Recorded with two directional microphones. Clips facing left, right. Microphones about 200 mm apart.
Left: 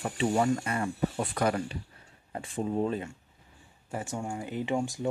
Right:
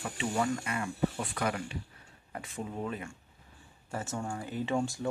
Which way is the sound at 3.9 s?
15° left (ahead or behind).